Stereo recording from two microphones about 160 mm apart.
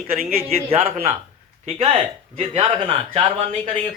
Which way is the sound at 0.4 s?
40° right (ahead or behind).